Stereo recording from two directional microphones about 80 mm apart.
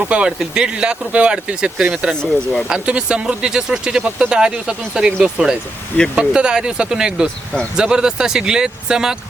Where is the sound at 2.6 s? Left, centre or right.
Centre.